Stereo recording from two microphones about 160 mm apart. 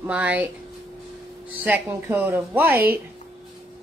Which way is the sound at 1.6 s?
10° right (ahead or behind).